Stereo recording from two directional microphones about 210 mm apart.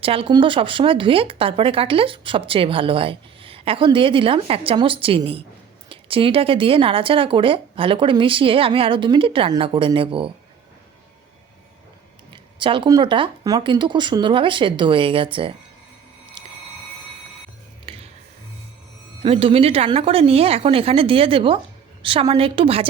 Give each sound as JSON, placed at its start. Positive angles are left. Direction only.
{"t": 0.0, "sound": "speech", "side_deg": -25}
{"t": 12.3, "sound": "speech", "side_deg": -25}
{"t": 17.8, "sound": "a sound", "side_deg": -25}
{"t": 19.2, "sound": "speech", "side_deg": -25}